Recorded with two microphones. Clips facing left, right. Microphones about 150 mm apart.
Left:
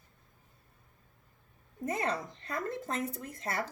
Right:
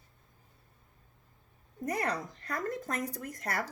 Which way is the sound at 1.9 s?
25° left (ahead or behind).